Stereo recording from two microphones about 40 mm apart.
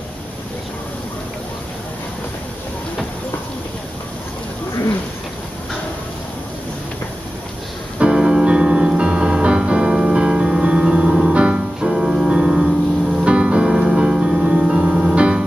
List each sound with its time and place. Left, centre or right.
8.0 s music: right
11.9 s music: centre